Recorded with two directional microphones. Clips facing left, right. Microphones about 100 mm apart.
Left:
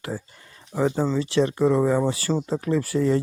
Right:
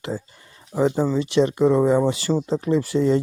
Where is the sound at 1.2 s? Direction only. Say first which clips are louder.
Right 3 dB; 20° right (ahead or behind).